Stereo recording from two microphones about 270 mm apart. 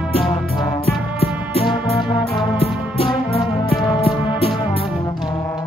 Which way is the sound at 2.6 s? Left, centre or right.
Centre.